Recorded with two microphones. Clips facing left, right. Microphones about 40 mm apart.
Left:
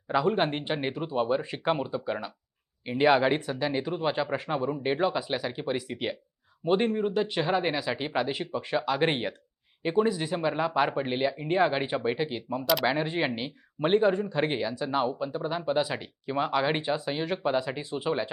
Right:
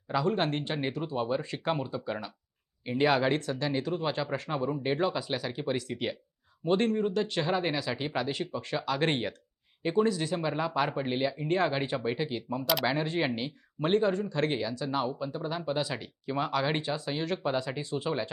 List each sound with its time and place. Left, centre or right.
0.1 s speech: centre